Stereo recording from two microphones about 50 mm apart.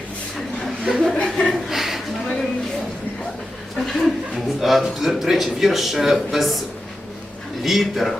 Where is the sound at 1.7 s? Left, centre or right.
Centre.